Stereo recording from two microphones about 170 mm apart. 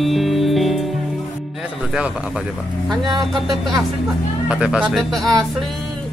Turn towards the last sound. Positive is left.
turn(degrees=0)  # may be behind; listen again after turning